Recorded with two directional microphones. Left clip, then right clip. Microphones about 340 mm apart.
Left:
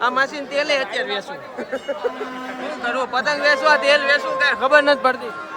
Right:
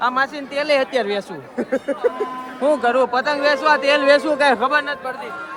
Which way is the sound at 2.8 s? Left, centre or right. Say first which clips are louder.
Right 3 dB; centre.